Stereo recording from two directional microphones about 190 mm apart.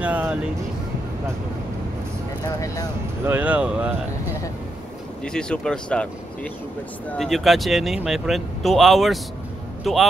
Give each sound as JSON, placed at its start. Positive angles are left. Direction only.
{"t": 0.0, "sound": "speech", "side_deg": -5}
{"t": 2.4, "sound": "speech", "side_deg": 20}
{"t": 3.3, "sound": "speech", "side_deg": -10}
{"t": 5.2, "sound": "speech", "side_deg": 5}